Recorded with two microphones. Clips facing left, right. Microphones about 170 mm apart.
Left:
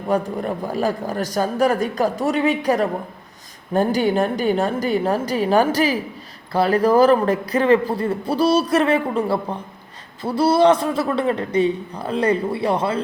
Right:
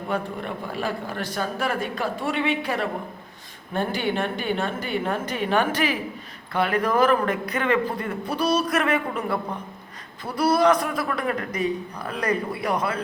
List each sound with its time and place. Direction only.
0.1 s a man's voice: 40° left (ahead or behind)